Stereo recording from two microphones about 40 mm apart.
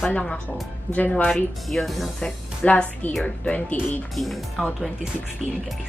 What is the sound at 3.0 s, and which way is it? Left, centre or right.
Speech, left.